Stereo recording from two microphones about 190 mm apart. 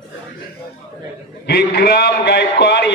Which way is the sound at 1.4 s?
55° left (ahead or behind).